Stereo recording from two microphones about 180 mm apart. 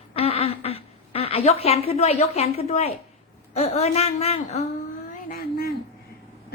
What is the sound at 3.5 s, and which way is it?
A woman's voice, 35° left (ahead or behind).